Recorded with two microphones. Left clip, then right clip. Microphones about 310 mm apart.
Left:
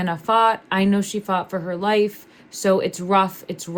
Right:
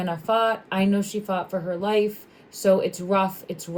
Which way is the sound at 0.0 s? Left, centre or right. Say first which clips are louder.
Left 5 dB; left.